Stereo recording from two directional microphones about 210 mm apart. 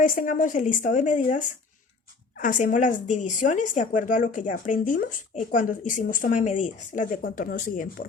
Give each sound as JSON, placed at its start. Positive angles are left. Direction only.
{"t": 0.0, "sound": "a woman's voice", "side_deg": 40}